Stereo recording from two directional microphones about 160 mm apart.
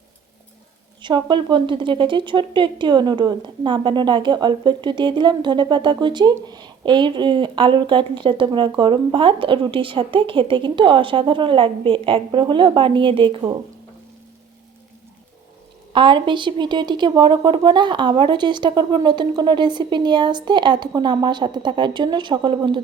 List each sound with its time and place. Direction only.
1.0 s a woman's voice: 30° right (ahead or behind)
15.9 s a woman's voice: 30° right (ahead or behind)